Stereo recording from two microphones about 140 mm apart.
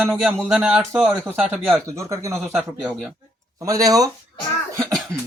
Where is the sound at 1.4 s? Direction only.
15° right (ahead or behind).